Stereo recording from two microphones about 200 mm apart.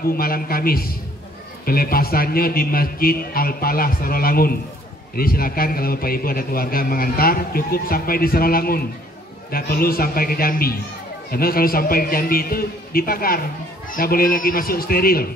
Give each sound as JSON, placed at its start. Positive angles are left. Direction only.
{"t": 0.1, "sound": "a man's voice", "side_deg": 50}